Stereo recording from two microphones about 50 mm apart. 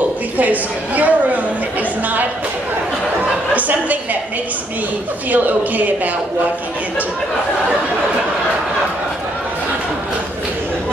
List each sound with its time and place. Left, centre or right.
0.4 s a woman's voice: right
3.5 s a woman's voice: right
5.3 s a woman's voice: right